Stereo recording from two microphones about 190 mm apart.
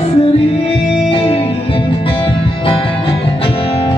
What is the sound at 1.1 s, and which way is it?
Music, 30° left (ahead or behind).